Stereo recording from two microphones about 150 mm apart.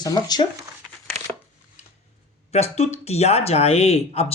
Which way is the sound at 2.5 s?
45° left (ahead or behind).